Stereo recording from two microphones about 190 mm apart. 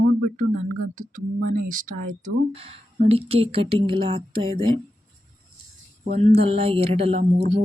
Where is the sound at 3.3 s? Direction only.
30° right (ahead or behind).